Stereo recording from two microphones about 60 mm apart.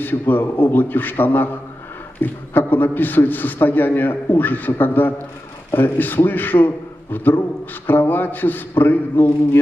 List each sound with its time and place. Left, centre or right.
0.0 s a man's voice: left